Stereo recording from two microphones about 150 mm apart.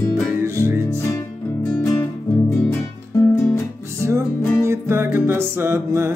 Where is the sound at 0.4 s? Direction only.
15° right (ahead or behind).